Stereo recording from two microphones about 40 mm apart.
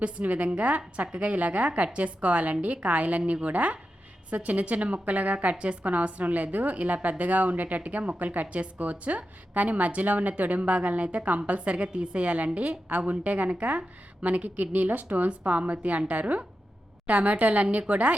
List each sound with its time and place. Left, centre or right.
0.0 s a woman's voice: right